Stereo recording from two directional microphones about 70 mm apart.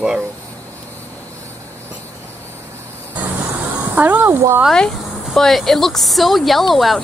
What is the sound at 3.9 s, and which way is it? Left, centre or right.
Speech, right.